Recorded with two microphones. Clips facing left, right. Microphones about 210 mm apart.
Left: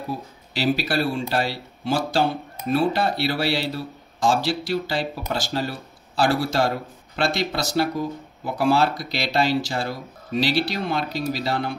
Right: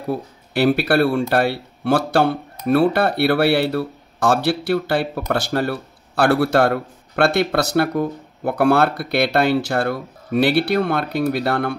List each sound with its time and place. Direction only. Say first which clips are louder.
0.1 s speech: right 10 dB; 60° right (ahead or behind)